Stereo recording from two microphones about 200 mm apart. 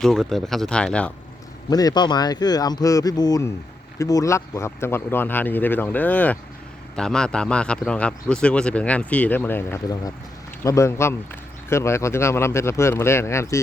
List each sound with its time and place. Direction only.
0.0 s a man's voice: centre (ahead or behind)
1.7 s a man's voice: 20° left (ahead or behind)